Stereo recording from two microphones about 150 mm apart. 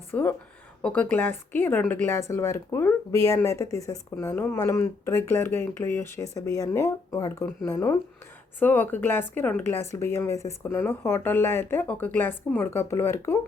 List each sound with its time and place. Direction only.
0.1 s speech: 15° left (ahead or behind)